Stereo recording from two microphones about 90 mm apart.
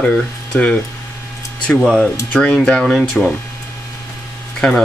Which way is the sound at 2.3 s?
15° left (ahead or behind).